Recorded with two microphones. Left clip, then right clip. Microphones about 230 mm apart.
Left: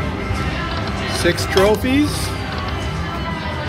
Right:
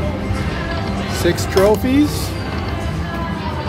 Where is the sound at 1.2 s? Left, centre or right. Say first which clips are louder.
Right 1 dB; centre.